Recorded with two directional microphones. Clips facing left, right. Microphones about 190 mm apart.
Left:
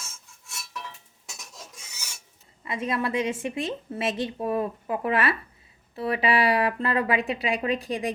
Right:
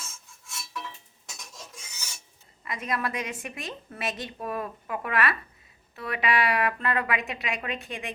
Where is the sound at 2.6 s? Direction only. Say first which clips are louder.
Left 3 dB; 25° left (ahead or behind).